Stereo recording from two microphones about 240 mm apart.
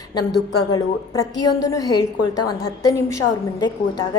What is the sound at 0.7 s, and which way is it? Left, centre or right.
A woman's voice, centre.